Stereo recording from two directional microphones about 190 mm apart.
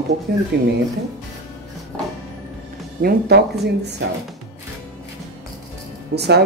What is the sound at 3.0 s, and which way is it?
Speech, 55° right (ahead or behind).